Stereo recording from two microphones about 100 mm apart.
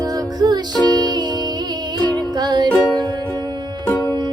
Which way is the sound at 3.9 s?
30° left (ahead or behind).